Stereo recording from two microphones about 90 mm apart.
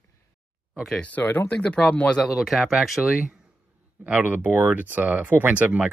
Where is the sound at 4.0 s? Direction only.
20° right (ahead or behind).